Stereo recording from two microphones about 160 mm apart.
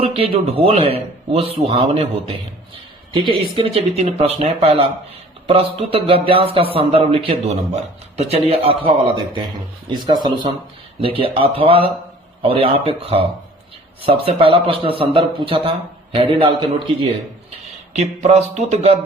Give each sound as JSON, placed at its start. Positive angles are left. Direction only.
{"t": 0.0, "sound": "speech", "side_deg": -35}
{"t": 11.0, "sound": "speech", "side_deg": -35}
{"t": 17.9, "sound": "a sound", "side_deg": -45}